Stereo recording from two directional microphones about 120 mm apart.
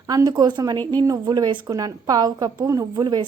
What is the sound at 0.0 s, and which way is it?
A woman's voice, 30° right (ahead or behind).